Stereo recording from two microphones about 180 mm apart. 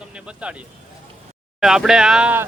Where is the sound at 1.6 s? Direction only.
Centre (ahead or behind).